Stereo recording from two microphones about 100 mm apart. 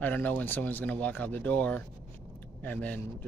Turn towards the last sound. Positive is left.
turn(degrees=15)  # may be behind; listen again after turning